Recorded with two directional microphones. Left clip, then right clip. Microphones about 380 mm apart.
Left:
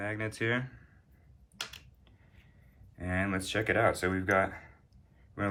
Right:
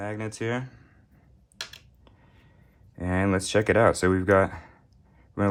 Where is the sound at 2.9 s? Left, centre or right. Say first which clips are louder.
Right 7 dB; centre.